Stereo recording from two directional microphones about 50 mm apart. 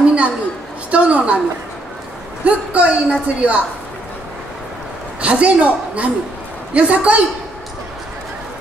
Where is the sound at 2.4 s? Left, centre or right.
Right.